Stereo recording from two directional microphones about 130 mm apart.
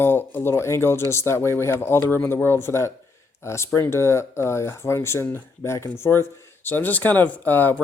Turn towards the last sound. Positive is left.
turn(degrees=15)  # may be behind; listen again after turning